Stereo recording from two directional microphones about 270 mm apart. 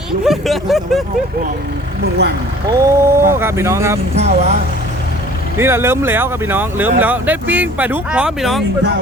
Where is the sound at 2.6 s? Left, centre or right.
Centre.